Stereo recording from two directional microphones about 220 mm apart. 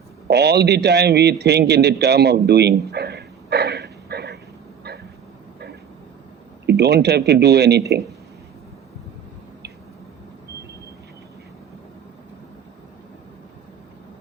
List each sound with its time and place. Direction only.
0.3 s a man's voice: 50° right (ahead or behind)
6.7 s a man's voice: 50° right (ahead or behind)